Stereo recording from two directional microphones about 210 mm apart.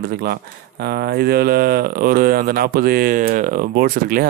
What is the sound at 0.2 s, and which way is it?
Speech, 50° right (ahead or behind).